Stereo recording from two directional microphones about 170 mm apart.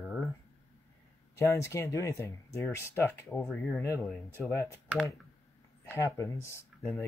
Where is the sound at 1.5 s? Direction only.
15° left (ahead or behind).